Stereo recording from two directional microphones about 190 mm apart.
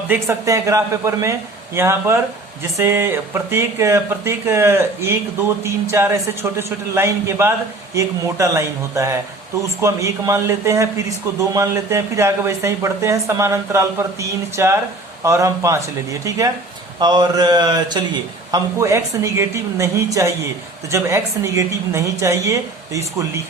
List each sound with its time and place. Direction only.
0.1 s a man's voice: 15° right (ahead or behind)
17.0 s a man's voice: 20° right (ahead or behind)